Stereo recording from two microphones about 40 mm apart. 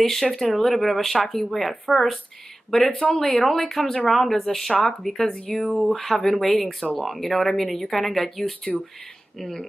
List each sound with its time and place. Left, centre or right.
0.0 s speech: centre
2.7 s speech: left
3.2 s speech: centre
5.8 s speech: centre